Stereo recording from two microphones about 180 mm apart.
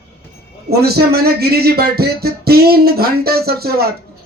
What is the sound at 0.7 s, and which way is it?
Speech, 60° right (ahead or behind).